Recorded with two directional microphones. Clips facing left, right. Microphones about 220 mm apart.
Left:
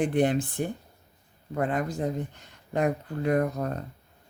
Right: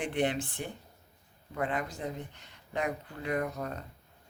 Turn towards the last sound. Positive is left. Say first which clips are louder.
# left 7 dB
turn(degrees=45)  # may be behind; listen again after turning